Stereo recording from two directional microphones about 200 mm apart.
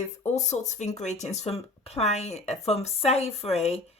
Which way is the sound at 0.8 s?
35° left (ahead or behind).